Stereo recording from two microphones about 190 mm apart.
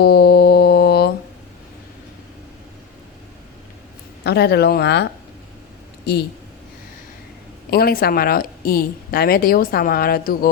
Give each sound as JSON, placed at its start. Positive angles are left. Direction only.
{"t": 0.0, "sound": "mantra", "side_deg": 55}
{"t": 4.2, "sound": "speech", "side_deg": 60}
{"t": 6.1, "sound": "speech", "side_deg": 60}
{"t": 7.7, "sound": "a woman's voice", "side_deg": 55}